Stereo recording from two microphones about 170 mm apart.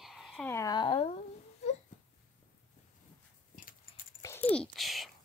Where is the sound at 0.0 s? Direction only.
Centre (ahead or behind).